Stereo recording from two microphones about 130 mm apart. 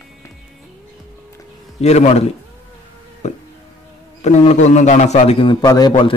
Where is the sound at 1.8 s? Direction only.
55° left (ahead or behind).